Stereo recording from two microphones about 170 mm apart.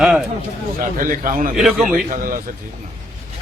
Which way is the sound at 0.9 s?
50° right (ahead or behind).